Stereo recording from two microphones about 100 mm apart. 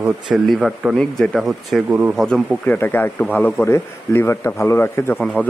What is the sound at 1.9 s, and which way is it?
Speech, 15° right (ahead or behind).